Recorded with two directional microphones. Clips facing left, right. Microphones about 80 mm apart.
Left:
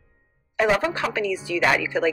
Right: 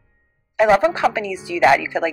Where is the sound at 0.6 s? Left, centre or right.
Right.